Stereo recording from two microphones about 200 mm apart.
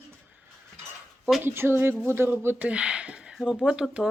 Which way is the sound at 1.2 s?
10° right (ahead or behind).